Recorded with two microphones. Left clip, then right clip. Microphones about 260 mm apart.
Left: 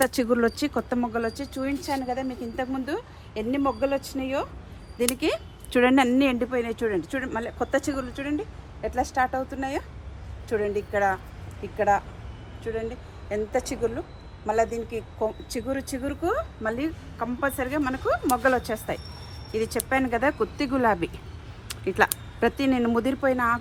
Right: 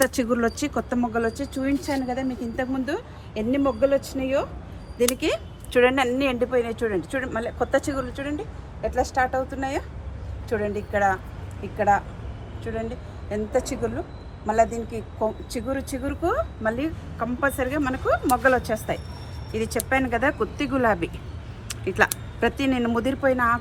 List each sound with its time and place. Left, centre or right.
0.1 s speech: left